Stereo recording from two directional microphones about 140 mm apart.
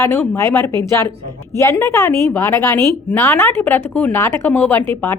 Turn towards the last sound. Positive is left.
turn(degrees=15)  # may be behind; listen again after turning